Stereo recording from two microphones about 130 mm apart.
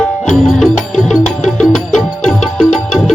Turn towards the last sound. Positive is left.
turn(degrees=0)  # may be behind; listen again after turning